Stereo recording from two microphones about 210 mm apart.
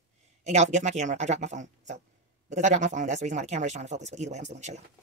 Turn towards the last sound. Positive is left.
turn(degrees=-35)  # may be behind; listen again after turning